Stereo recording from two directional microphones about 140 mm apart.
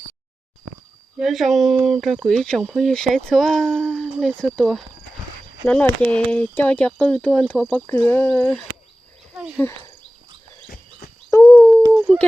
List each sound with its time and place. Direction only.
1.2 s speech: centre (ahead or behind)
7.9 s speech: 15° left (ahead or behind)
9.3 s wild animals: 5° right (ahead or behind)
9.6 s speech: 20° left (ahead or behind)
11.4 s a sound: 5° left (ahead or behind)
12.1 s speech: 5° left (ahead or behind)